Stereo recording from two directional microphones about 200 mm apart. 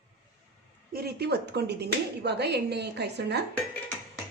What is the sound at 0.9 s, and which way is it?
Speech, 50° right (ahead or behind).